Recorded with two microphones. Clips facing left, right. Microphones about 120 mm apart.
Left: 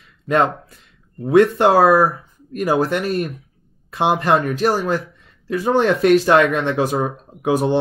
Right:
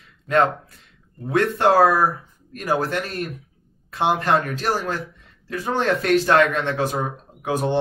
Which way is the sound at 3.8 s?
15° left (ahead or behind).